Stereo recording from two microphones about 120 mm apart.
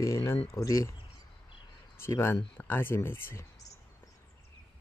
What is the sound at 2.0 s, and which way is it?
Speech, 20° left (ahead or behind).